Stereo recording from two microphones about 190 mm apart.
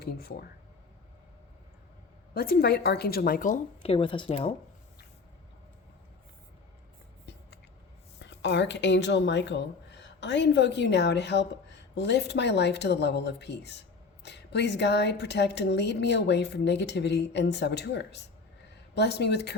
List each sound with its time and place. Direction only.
0.0 s a woman's voice: 55° left (ahead or behind)
2.3 s a woman's voice: 55° left (ahead or behind)
3.9 s speech: 25° left (ahead or behind)
8.2 s a woman's voice: 65° left (ahead or behind)